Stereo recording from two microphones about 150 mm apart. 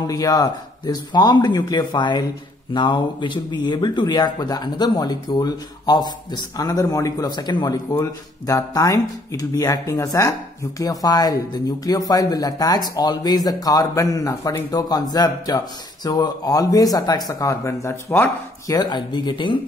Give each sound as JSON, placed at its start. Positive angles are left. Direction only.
{"t": 0.0, "sound": "speech", "side_deg": 25}
{"t": 18.7, "sound": "speech", "side_deg": 30}